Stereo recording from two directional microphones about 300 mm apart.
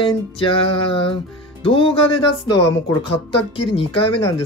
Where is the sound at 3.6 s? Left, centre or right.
Centre.